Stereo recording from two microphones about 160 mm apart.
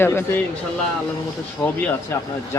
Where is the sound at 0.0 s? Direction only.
15° left (ahead or behind).